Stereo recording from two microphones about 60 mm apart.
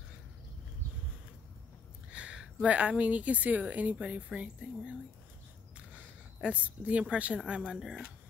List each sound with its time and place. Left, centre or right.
2.1 s speech: centre
5.9 s a woman's voice: right